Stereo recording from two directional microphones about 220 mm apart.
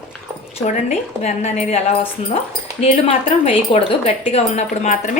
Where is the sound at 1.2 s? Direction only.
30° left (ahead or behind).